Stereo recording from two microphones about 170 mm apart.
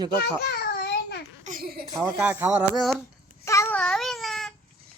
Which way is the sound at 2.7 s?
Centre (ahead or behind).